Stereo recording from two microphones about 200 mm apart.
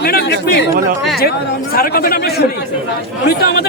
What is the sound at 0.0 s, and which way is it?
Speech, 50° left (ahead or behind).